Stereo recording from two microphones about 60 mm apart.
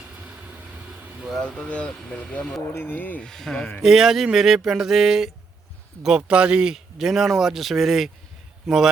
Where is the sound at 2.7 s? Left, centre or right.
Left.